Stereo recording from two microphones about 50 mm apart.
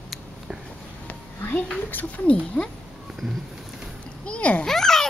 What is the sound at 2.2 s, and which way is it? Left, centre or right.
Speech, left.